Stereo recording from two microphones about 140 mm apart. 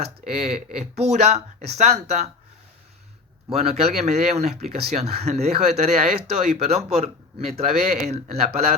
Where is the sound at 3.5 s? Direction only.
50° right (ahead or behind).